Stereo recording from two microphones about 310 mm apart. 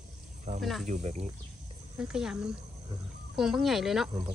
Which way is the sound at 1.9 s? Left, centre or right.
Centre.